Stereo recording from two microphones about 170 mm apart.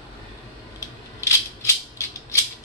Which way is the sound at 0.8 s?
15° left (ahead or behind).